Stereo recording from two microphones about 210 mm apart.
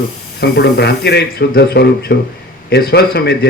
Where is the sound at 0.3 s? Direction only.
50° left (ahead or behind).